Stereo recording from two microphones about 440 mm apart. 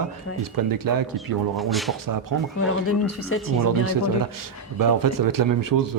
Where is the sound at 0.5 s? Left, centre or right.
Right.